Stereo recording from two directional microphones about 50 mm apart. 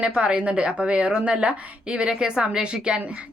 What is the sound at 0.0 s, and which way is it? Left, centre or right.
A woman's voice, right.